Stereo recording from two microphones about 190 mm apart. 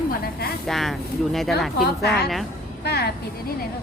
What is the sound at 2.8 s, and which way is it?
Speech, 60° left (ahead or behind).